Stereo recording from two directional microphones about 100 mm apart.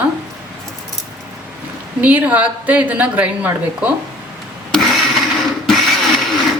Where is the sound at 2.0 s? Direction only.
15° right (ahead or behind).